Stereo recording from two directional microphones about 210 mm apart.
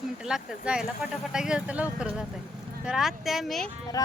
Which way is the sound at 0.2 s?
5° right (ahead or behind).